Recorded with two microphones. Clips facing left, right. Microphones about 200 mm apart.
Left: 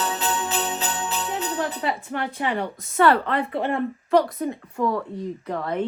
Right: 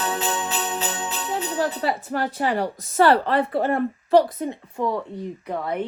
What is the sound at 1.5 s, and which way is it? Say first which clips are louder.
A woman's voice: right 5 dB; 35° right (ahead or behind).